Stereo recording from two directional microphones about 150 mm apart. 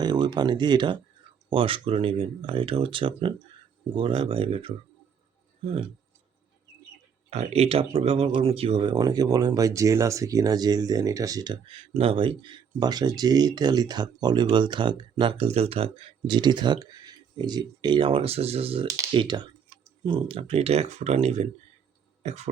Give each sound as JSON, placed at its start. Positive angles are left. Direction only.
{"t": 0.0, "sound": "speech", "side_deg": -30}
{"t": 7.3, "sound": "speech", "side_deg": -45}
{"t": 22.2, "sound": "throat clearing", "side_deg": -45}